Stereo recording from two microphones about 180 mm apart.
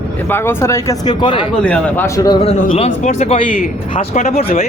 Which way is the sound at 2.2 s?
30° left (ahead or behind).